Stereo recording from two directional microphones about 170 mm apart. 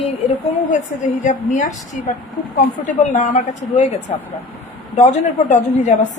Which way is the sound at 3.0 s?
50° left (ahead or behind).